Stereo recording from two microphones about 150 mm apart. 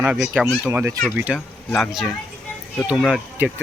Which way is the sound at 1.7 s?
Centre (ahead or behind).